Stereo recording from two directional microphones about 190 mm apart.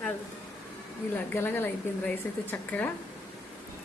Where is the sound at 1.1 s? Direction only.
10° left (ahead or behind).